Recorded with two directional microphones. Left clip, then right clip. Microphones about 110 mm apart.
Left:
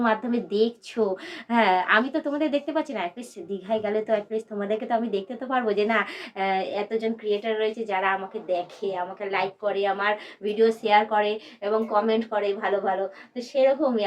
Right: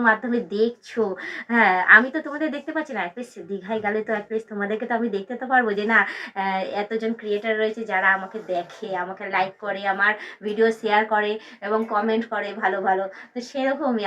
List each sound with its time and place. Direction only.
0.0 s a woman's voice: 40° left (ahead or behind)